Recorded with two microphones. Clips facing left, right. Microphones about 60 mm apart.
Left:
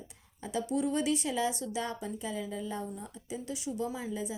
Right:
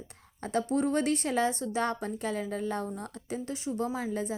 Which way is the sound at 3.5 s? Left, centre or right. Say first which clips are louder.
Right 2 dB; right.